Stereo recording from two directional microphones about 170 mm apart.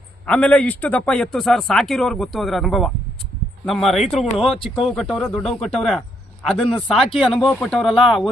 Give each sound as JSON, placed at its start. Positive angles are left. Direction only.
{"t": 0.3, "sound": "a man's voice", "side_deg": 5}